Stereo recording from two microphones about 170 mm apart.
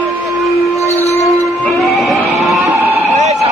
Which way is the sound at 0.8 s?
40° left (ahead or behind).